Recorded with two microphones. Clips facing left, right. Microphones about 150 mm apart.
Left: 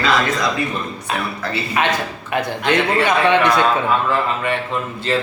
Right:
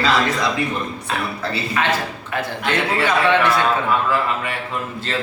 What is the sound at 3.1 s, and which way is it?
Speech, 20° left (ahead or behind).